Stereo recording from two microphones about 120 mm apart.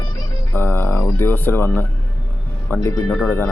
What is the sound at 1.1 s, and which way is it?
A man's voice, 15° left (ahead or behind).